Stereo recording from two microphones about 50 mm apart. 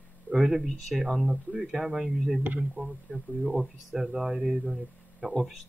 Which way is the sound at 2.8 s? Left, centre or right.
Right.